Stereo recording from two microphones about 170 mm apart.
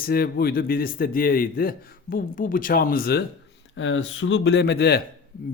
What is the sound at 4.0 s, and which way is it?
Speech, 90° left.